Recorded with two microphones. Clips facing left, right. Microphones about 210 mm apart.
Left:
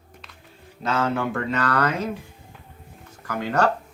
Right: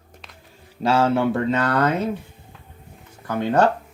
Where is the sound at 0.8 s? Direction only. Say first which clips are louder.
Right 5 dB; 30° right (ahead or behind).